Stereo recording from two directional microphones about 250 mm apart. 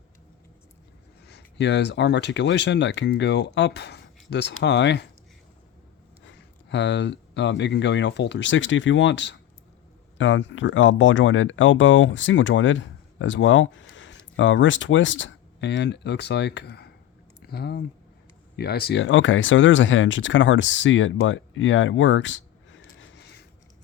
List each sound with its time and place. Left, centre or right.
1.3 s speech: left
6.2 s speech: left